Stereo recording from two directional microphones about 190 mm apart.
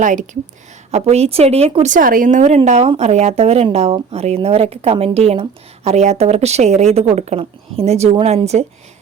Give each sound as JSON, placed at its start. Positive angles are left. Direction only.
{"t": 0.0, "sound": "a woman's voice", "side_deg": -40}